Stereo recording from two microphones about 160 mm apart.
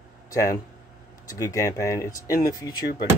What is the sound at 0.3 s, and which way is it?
Speech, 20° left (ahead or behind).